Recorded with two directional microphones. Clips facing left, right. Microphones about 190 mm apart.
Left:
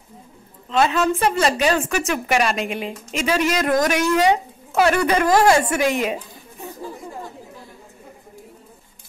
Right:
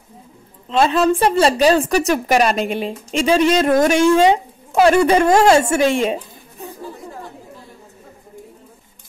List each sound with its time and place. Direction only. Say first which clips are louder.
0.7 s a woman's voice: right 4 dB; 30° right (ahead or behind)